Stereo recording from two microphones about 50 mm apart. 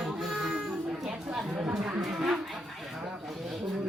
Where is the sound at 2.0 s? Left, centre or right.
Centre.